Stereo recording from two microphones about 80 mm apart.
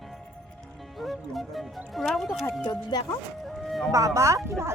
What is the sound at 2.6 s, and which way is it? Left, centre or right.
Speech, left.